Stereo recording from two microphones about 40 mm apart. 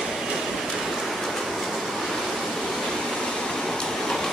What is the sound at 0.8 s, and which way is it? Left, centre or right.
Pink noise, centre.